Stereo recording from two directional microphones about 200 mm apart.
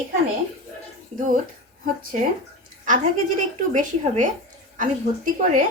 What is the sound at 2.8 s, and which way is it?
A woman's voice, 40° right (ahead or behind).